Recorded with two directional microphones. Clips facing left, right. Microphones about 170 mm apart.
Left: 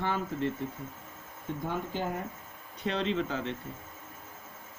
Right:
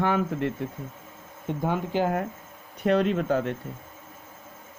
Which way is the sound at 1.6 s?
80° right.